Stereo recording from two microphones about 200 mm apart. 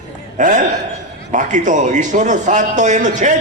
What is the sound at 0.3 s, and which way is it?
A man's voice, 40° right (ahead or behind).